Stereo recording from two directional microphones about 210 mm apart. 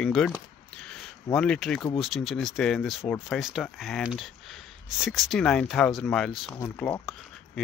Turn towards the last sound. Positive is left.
turn(degrees=5)  # may be behind; listen again after turning